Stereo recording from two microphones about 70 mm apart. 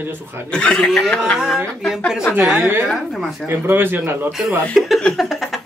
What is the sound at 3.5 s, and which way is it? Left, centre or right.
Speech, right.